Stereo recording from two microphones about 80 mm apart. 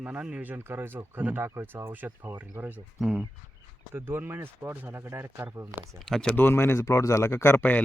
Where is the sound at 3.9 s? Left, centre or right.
Right.